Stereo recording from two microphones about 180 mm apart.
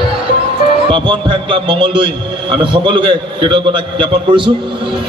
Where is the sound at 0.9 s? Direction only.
25° right (ahead or behind).